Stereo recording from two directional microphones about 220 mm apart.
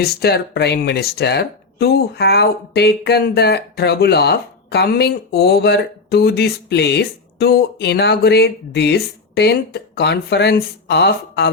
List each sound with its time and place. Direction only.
0.0 s speech: 45° left (ahead or behind)